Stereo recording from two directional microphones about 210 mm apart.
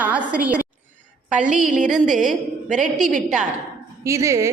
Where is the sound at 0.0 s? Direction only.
5° right (ahead or behind).